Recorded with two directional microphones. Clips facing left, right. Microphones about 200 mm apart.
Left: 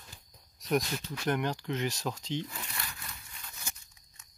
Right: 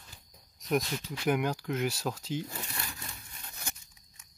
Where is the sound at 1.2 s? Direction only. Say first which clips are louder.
Right 2 dB; 10° right (ahead or behind).